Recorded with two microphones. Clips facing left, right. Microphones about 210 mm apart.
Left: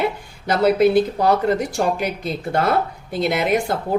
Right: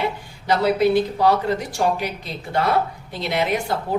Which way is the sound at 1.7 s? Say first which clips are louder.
Left 1 dB; 50° left (ahead or behind).